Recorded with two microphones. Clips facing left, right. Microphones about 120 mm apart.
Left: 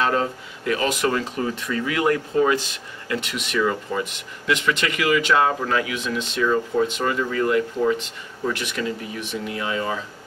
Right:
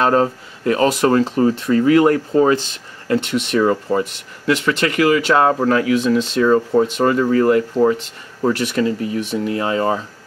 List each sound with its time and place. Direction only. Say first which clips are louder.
0.0 s speech: right 6 dB; 40° right (ahead or behind)